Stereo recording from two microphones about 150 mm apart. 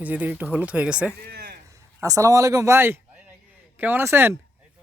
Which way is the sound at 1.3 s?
90° right.